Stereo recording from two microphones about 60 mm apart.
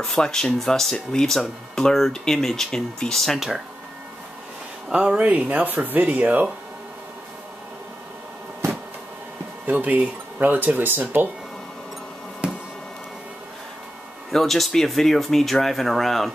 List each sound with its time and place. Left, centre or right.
0.0 s speech: centre
3.3 s speech: centre
4.8 s speech: centre
9.7 s speech: right
14.3 s speech: centre